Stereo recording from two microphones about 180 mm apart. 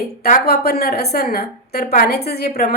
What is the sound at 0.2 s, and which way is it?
A woman's voice, 55° left (ahead or behind).